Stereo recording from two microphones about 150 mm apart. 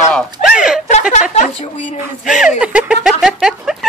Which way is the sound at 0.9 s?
50° left (ahead or behind).